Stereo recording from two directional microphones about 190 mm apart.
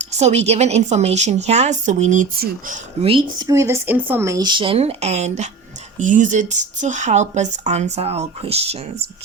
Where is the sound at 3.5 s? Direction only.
15° right (ahead or behind).